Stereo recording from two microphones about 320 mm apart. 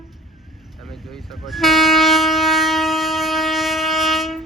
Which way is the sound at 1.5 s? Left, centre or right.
Centre.